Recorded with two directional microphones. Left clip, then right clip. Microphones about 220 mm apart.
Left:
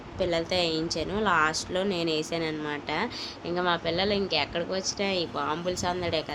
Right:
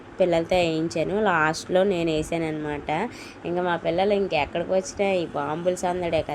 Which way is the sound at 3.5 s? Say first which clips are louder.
Right 3 dB; 15° right (ahead or behind).